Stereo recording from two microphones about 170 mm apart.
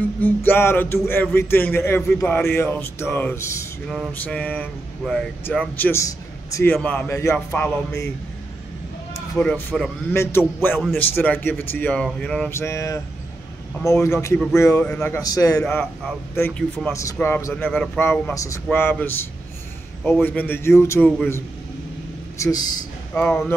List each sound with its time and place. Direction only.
0.2 s speech: 10° left (ahead or behind)
9.4 s speech: 10° left (ahead or behind)
14.0 s speech: 15° left (ahead or behind)
15.1 s a man's voice: 20° left (ahead or behind)
16.3 s speech: 10° left (ahead or behind)
22.4 s a man's voice: 20° left (ahead or behind)